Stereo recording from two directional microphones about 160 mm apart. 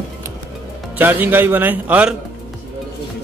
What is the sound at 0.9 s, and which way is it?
A man's voice, 10° right (ahead or behind).